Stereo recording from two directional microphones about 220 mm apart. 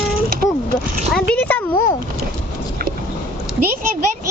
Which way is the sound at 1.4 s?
10° left (ahead or behind).